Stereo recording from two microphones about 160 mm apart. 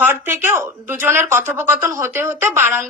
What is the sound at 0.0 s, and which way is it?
Speech, 15° right (ahead or behind).